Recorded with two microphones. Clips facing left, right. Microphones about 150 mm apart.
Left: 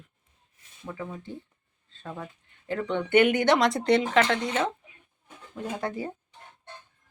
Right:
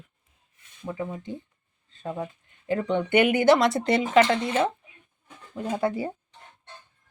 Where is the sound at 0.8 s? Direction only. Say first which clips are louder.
Right 4 dB; 20° right (ahead or behind).